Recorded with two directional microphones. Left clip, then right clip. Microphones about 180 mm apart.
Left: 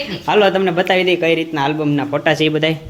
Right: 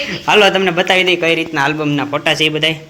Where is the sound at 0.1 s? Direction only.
10° left (ahead or behind); by 2.7 s 35° left (ahead or behind).